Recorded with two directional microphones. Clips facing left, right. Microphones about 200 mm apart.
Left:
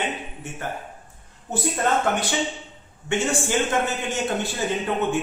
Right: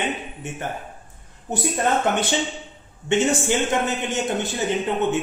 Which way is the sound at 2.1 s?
20° right (ahead or behind).